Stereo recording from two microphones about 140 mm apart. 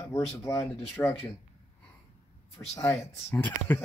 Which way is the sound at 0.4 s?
20° left (ahead or behind).